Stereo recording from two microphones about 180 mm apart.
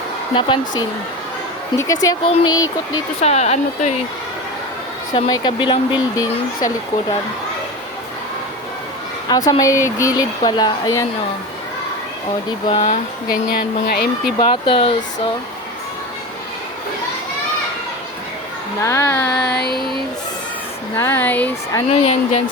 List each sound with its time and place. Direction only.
0.3 s speech: 25° left (ahead or behind)
1.8 s speech: 20° left (ahead or behind)
3.2 s a woman's voice: 35° left (ahead or behind)
5.3 s speech: 25° left (ahead or behind)
9.3 s speech: 20° left (ahead or behind)
12.6 s a woman's voice: 35° left (ahead or behind)
13.5 s speech: 55° left (ahead or behind)
14.3 s speech: 30° left (ahead or behind)
18.8 s child singing: 15° left (ahead or behind)
20.9 s child singing: 10° left (ahead or behind)
21.8 s a woman's voice: 35° left (ahead or behind)